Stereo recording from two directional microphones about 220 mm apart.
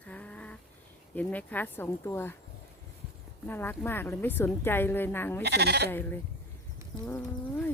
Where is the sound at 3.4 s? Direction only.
10° left (ahead or behind).